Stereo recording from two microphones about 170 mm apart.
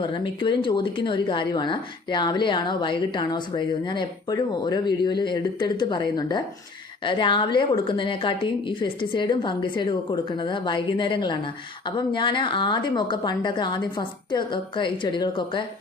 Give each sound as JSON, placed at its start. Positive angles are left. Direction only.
{"t": 0.0, "sound": "a woman's voice", "side_deg": 30}